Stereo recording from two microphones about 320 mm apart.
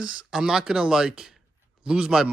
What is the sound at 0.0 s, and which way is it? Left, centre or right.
Speech, centre.